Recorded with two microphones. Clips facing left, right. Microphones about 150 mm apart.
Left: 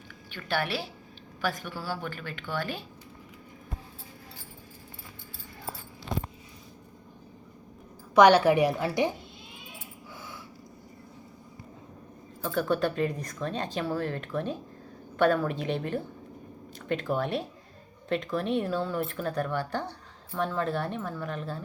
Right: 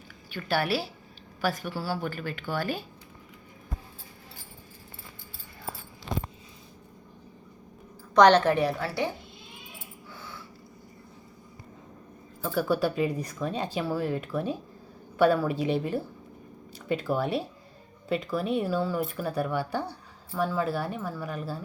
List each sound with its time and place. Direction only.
0.3 s a woman's voice: 5° right (ahead or behind)
8.1 s a woman's voice: 10° left (ahead or behind)
10.2 s a sound: 15° left (ahead or behind)
12.4 s speech: 5° right (ahead or behind)